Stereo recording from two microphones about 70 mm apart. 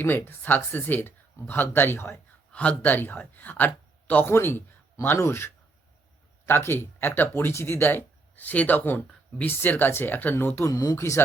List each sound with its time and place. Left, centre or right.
0.0 s speech: left
2.5 s speech: centre
10.7 s speech: left